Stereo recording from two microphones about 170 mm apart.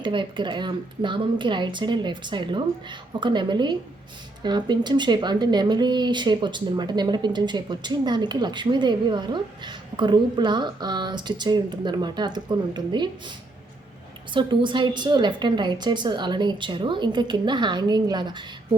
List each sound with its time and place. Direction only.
0.0 s speech: 30° right (ahead or behind)
14.3 s speech: 30° right (ahead or behind)